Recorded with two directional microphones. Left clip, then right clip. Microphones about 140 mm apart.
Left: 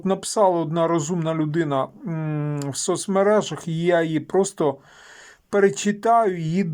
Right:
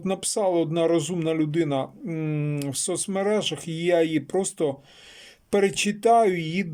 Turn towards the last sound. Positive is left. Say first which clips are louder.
# left 1 dB
turn(degrees=-15)  # may be behind; listen again after turning